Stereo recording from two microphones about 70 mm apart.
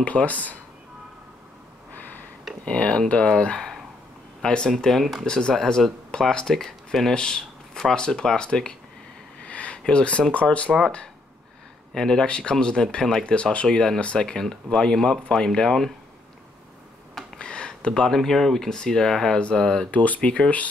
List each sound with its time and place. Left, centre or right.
0.0 s speech: centre
2.6 s speech: centre
9.5 s a sound: centre
10.3 s speech: centre
11.9 s speech: centre
17.4 s speech: centre